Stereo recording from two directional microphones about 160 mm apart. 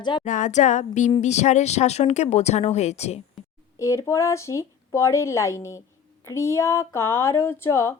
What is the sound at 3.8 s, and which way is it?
A woman's voice, 20° left (ahead or behind).